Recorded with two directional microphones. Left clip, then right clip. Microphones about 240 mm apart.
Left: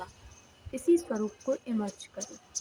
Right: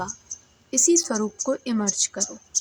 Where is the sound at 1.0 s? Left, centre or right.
Right.